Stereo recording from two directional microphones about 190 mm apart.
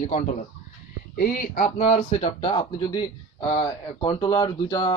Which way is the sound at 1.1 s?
50° left (ahead or behind).